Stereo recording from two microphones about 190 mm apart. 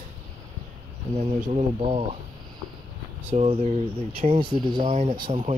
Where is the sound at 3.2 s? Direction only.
30° right (ahead or behind).